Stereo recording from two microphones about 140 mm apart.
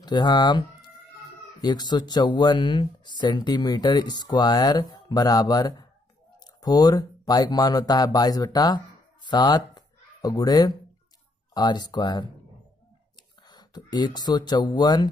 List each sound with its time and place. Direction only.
0.0 s speech: 30° left (ahead or behind)